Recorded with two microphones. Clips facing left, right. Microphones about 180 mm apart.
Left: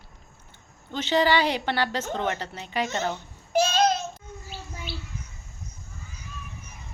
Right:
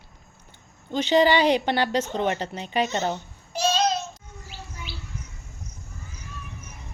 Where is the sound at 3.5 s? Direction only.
55° left (ahead or behind).